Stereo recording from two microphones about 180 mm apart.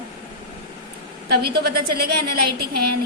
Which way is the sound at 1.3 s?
60° right (ahead or behind).